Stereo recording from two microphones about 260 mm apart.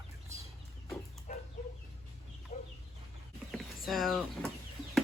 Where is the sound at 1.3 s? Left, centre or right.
Left.